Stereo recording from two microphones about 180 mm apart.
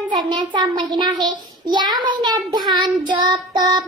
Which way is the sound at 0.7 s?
25° right (ahead or behind).